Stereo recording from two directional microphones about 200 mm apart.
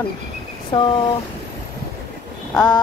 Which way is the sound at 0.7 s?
25° left (ahead or behind).